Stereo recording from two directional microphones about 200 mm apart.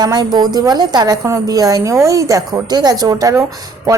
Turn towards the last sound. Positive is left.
turn(degrees=-15)  # may be behind; listen again after turning